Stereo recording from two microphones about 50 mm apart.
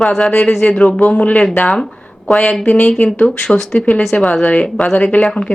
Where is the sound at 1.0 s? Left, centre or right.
Left.